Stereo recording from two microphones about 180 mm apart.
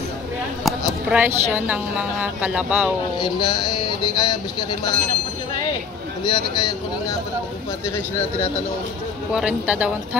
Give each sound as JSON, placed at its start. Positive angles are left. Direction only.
{"t": 0.7, "sound": "a woman's voice", "side_deg": -10}
{"t": 3.2, "sound": "speech", "side_deg": 25}
{"t": 6.2, "sound": "speech", "side_deg": 25}
{"t": 9.3, "sound": "speech", "side_deg": -5}